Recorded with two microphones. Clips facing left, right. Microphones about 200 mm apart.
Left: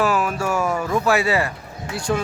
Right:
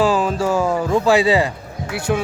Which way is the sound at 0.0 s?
30° right (ahead or behind).